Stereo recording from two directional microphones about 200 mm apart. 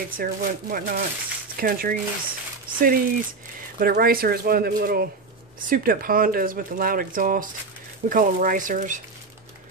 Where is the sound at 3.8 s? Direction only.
45° right (ahead or behind).